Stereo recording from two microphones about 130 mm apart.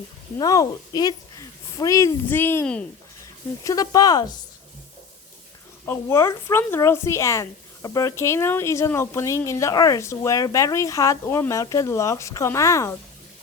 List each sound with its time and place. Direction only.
0.3 s a woman's voice: 25° left (ahead or behind)
5.8 s speech: 20° left (ahead or behind)